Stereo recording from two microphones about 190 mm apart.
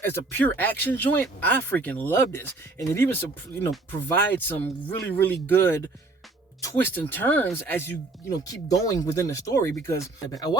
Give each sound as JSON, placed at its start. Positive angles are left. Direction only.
{"t": 0.0, "sound": "speech", "side_deg": 10}